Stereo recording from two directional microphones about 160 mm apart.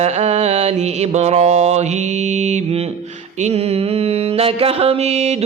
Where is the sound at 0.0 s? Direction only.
40° right (ahead or behind).